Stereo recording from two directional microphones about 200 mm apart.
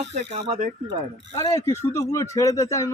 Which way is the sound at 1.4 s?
15° left (ahead or behind).